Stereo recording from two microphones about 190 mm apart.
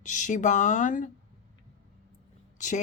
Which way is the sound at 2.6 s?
40° left (ahead or behind).